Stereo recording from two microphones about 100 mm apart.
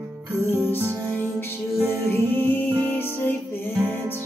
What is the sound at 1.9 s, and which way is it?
Music, 20° left (ahead or behind).